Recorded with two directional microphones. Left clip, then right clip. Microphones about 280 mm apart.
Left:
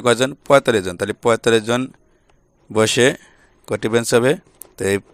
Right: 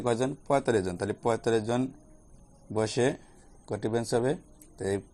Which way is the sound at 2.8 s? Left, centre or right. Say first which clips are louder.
Left 13 dB; left.